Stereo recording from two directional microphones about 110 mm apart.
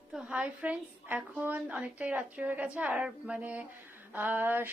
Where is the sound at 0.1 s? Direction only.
10° right (ahead or behind).